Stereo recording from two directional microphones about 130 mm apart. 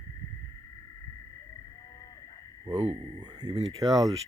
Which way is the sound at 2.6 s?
25° right (ahead or behind).